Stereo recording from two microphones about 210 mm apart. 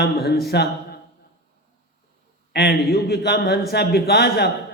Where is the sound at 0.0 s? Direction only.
50° left (ahead or behind).